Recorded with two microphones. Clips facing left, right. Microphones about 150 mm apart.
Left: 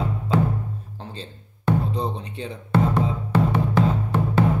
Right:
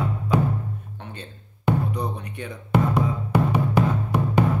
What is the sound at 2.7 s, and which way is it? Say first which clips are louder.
Music: even; 15° right (ahead or behind).